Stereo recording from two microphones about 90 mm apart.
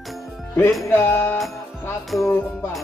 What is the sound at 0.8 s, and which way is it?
Music, 25° left (ahead or behind).